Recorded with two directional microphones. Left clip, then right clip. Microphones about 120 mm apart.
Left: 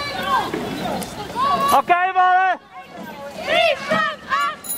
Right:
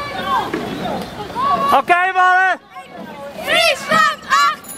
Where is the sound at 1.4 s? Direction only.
30° left (ahead or behind).